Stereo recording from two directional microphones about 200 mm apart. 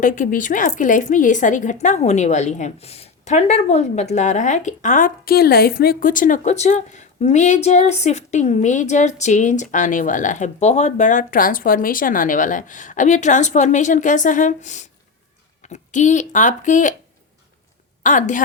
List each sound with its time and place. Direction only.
0.0 s speech: 40° left (ahead or behind)
18.0 s speech: 40° left (ahead or behind)